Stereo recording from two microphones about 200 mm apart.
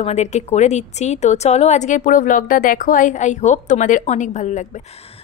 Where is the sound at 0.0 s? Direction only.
35° left (ahead or behind).